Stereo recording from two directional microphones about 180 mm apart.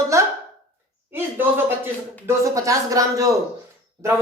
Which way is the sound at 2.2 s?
20° right (ahead or behind).